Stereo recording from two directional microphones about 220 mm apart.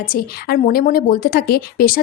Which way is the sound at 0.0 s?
40° left (ahead or behind).